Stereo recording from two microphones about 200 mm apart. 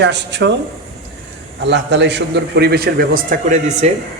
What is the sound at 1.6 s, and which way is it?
A man's voice, 60° right (ahead or behind).